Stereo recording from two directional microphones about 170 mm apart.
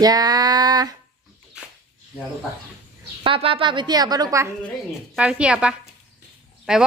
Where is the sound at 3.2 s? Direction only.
30° right (ahead or behind).